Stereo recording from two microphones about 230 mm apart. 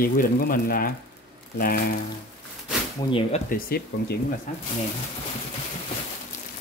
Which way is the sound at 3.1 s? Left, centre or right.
Left.